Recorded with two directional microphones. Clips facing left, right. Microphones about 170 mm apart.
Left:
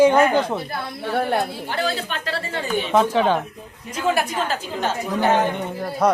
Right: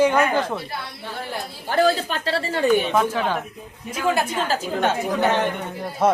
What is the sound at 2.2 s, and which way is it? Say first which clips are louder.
Speech: right 4 dB; 30° right (ahead or behind).